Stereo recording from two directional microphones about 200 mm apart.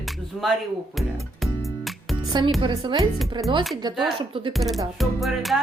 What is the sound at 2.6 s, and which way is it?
Speech, 20° right (ahead or behind).